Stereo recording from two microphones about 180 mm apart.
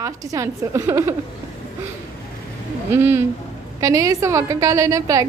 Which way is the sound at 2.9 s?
10° right (ahead or behind).